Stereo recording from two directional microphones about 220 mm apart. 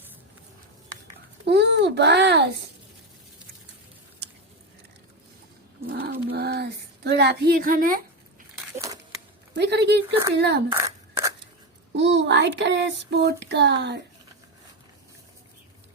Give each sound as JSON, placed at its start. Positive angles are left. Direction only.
{"t": 1.5, "sound": "speech", "side_deg": -50}
{"t": 5.9, "sound": "speech", "side_deg": -45}
{"t": 8.5, "sound": "a sound", "side_deg": -15}
{"t": 9.6, "sound": "speech", "side_deg": -50}
{"t": 10.7, "sound": "a sound", "side_deg": -15}
{"t": 11.9, "sound": "speech", "side_deg": -55}